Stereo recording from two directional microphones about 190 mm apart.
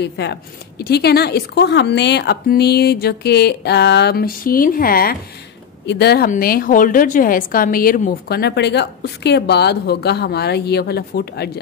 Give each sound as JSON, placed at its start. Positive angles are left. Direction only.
{"t": 0.0, "sound": "a woman's voice", "side_deg": 65}